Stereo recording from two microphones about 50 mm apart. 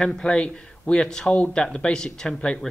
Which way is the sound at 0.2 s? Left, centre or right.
Centre.